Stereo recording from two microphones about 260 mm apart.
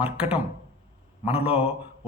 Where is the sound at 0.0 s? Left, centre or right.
Centre.